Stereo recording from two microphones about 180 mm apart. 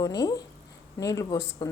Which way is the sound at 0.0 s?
20° left (ahead or behind).